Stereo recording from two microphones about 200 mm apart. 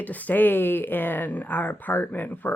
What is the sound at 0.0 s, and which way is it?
Speech, 10° left (ahead or behind).